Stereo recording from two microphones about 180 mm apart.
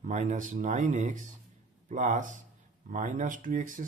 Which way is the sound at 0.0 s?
45° right (ahead or behind).